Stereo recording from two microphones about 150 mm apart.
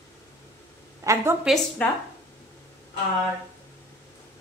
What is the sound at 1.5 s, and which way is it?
Speech, 5° right (ahead or behind).